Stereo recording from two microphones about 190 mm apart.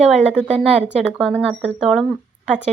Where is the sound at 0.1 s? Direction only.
5° right (ahead or behind).